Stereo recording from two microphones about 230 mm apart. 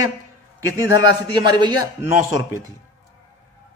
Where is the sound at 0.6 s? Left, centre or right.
Centre.